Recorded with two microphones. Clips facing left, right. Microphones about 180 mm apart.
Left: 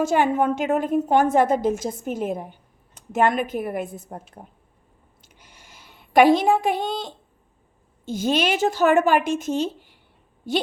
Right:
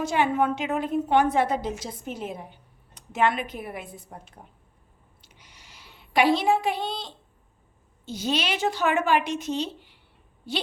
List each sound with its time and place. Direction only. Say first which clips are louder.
0.0 s a woman's voice: left 4 dB; 45° left (ahead or behind)
5.2 s a sound: left 3 dB; 50° left (ahead or behind)
8.0 s a woman's voice: left 6 dB; 50° left (ahead or behind)